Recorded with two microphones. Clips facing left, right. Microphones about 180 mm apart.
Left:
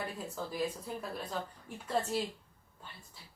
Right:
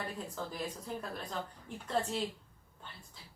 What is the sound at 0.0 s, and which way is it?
A woman's voice, 10° left (ahead or behind).